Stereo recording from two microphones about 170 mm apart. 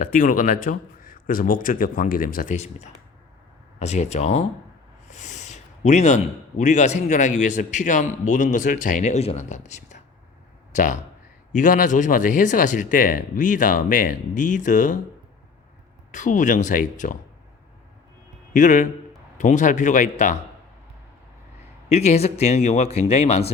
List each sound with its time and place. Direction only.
0.0 s a man's voice: 50° left (ahead or behind)
5.1 s a sound: 45° left (ahead or behind)
6.6 s a man's voice: 45° left (ahead or behind)
16.1 s a man's voice: 50° left (ahead or behind)
18.5 s a man's voice: 50° left (ahead or behind)
21.8 s speech: 40° left (ahead or behind)